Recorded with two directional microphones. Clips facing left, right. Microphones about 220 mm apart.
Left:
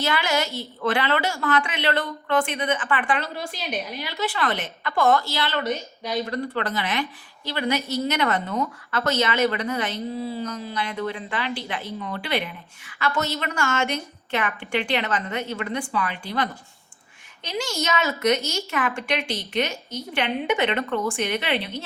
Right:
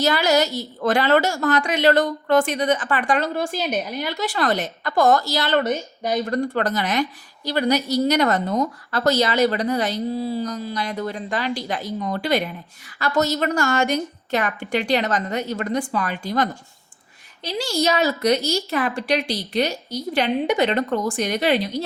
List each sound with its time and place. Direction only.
0.0 s a woman's voice: 40° right (ahead or behind)